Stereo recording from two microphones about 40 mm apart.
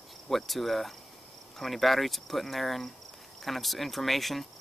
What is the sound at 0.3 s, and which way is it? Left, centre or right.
Speech, centre.